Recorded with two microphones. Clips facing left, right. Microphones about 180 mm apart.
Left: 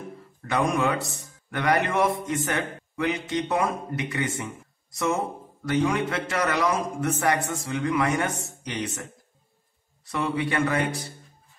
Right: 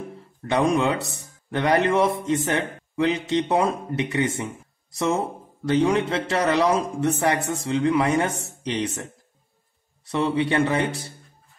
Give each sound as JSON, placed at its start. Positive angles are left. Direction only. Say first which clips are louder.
{"t": 0.5, "sound": "speech", "louder": "right 3 dB", "side_deg": -25}